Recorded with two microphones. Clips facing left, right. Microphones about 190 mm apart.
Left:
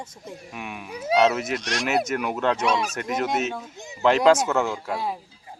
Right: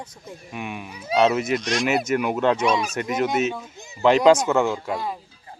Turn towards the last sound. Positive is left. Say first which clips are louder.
# right 2 dB
turn(degrees=5)  # may be behind; listen again after turning